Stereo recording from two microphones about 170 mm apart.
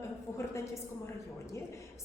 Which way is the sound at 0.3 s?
15° left (ahead or behind).